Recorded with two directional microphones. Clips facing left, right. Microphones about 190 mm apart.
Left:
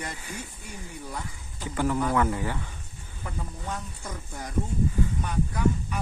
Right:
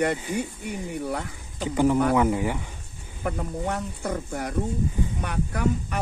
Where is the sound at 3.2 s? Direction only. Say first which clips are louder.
Right 9 dB; 70° right (ahead or behind).